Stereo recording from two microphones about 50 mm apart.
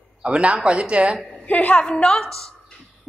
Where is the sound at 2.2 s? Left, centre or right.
Centre.